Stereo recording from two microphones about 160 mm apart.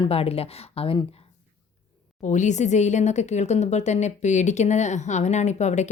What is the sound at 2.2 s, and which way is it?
Speech, 50° left (ahead or behind).